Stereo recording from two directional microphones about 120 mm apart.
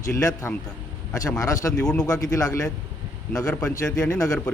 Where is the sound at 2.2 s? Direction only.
30° left (ahead or behind).